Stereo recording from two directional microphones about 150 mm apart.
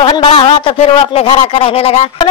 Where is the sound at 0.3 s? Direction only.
40° left (ahead or behind).